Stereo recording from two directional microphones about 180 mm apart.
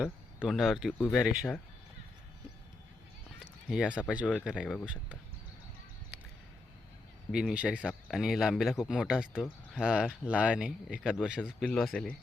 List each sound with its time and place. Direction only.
0.0 s speech: centre (ahead or behind)
3.7 s speech: 5° right (ahead or behind)
7.3 s speech: 5° right (ahead or behind)